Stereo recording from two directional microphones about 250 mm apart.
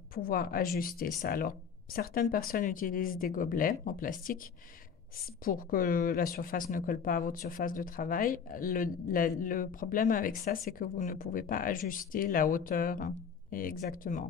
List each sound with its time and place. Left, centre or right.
0.1 s speech: left
5.4 s speech: left